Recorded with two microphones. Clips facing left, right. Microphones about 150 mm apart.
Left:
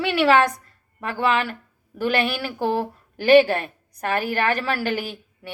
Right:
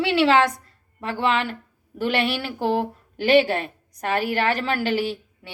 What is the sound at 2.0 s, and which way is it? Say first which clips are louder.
A woman's voice: left 1 dB; 25° right (ahead or behind).